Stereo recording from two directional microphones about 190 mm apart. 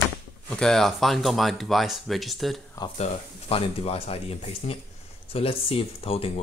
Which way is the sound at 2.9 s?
35° left (ahead or behind).